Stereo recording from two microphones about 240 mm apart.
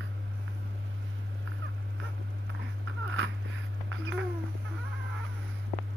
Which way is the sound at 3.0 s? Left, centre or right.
Right.